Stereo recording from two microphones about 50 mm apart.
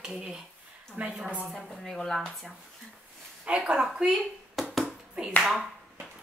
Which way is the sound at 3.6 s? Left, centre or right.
Centre.